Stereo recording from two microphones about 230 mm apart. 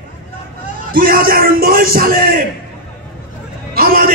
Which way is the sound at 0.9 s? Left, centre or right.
Right.